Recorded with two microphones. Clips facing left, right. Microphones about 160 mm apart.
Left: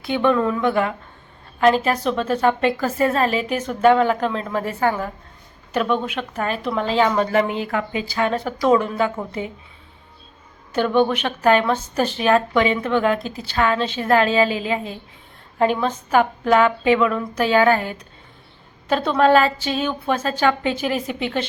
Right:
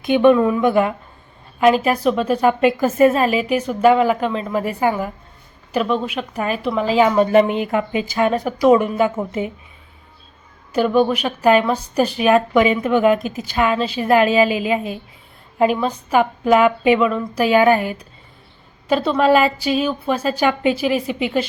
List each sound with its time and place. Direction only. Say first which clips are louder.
0.0 s a woman's voice: right 6 dB; 15° right (ahead or behind)
10.8 s a woman's voice: right 2 dB; 5° right (ahead or behind)
17.1 s a woman's voice: right 2 dB; centre (ahead or behind)
17.4 s a woman's voice: right 3 dB; 10° right (ahead or behind)